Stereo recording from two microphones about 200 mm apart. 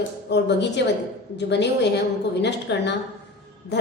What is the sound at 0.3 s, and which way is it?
A woman's voice, 60° left (ahead or behind).